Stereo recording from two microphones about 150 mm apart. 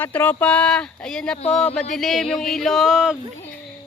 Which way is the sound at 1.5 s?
5° left (ahead or behind).